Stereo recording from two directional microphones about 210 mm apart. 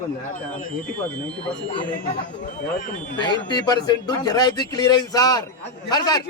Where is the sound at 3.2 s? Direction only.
20° left (ahead or behind).